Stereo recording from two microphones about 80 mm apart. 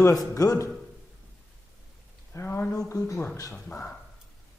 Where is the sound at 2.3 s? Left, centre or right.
Left.